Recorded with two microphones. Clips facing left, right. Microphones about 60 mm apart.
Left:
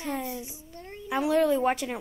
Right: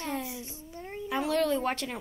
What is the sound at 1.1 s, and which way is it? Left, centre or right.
Speech, centre.